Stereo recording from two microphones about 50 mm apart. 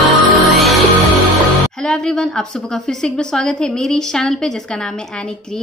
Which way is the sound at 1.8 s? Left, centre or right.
Centre.